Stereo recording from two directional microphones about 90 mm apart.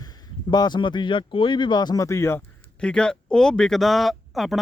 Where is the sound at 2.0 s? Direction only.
30° left (ahead or behind).